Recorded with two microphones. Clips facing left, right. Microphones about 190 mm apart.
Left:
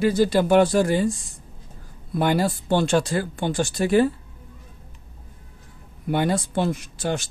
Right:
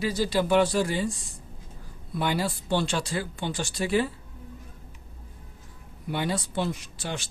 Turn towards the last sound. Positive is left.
turn(degrees=45)  # may be behind; listen again after turning